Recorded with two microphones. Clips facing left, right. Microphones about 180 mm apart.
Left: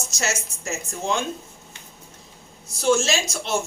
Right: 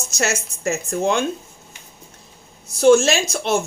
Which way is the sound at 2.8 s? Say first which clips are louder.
Right 7 dB; 55° right (ahead or behind).